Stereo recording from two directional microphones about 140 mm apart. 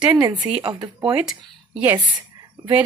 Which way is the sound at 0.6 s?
30° right (ahead or behind).